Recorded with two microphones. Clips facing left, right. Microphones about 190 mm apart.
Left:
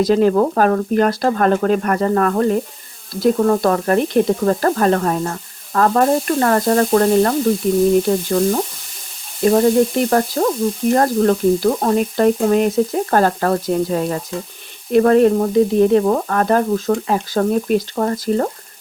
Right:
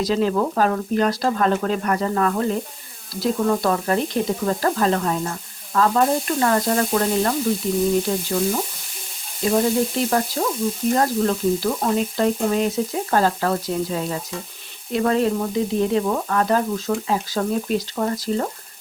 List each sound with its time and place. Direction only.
0.0 s frying: 55° left (ahead or behind)